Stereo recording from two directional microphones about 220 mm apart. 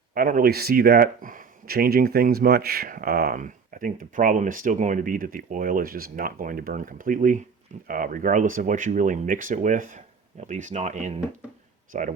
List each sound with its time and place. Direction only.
0.1 s speech: 40° right (ahead or behind)